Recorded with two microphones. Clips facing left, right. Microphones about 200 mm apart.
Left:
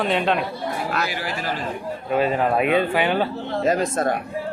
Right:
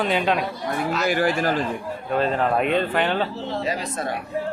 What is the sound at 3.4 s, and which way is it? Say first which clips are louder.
Speech: left 5 dB; 50° left (ahead or behind).